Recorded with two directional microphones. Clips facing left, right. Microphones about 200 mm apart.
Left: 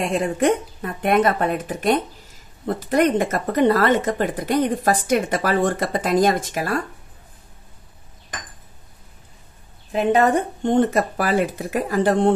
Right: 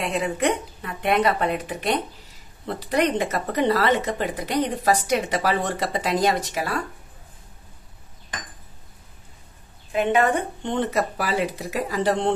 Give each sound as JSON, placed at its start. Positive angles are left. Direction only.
{"t": 0.0, "sound": "speech", "side_deg": 45}
{"t": 10.1, "sound": "speech", "side_deg": 40}